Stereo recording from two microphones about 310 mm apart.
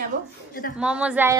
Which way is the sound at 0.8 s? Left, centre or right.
Centre.